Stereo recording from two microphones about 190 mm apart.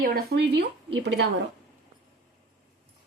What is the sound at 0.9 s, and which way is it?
Speech, 70° right (ahead or behind).